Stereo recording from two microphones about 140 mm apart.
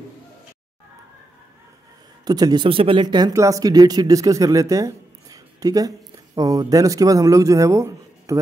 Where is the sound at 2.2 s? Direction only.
30° right (ahead or behind).